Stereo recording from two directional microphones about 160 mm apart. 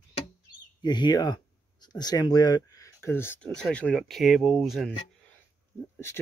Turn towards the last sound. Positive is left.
turn(degrees=0)  # may be behind; listen again after turning